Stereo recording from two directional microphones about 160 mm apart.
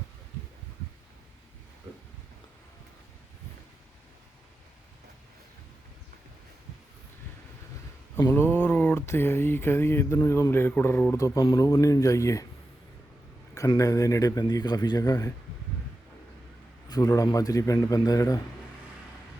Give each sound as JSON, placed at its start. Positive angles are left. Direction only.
{"t": 8.1, "sound": "a sound", "side_deg": 15}
{"t": 11.5, "sound": "a man's voice", "side_deg": 20}
{"t": 13.5, "sound": "a man's voice", "side_deg": 20}
{"t": 16.9, "sound": "a man's voice", "side_deg": 25}